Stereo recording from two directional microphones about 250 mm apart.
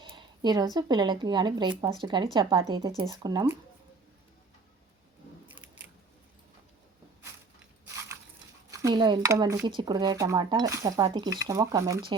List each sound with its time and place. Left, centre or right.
0.0 s speech: centre
8.7 s speech: centre